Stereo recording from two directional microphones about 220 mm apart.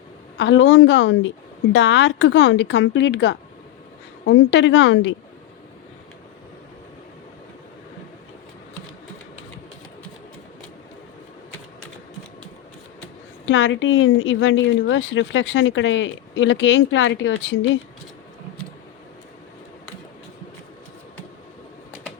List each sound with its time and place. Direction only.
0.3 s a woman's voice: 55° left (ahead or behind)
13.4 s a woman's voice: 60° left (ahead or behind)